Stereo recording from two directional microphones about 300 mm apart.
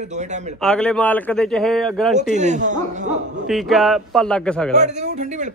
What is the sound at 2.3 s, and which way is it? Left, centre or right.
Speech, right.